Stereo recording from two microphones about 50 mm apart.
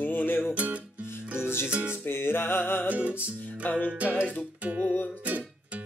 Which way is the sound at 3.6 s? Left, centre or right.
Left.